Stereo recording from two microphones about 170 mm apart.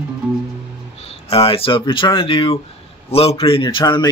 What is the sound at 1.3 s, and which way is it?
Speech, 35° left (ahead or behind).